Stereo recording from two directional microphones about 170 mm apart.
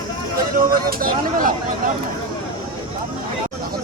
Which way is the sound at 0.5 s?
60° right (ahead or behind).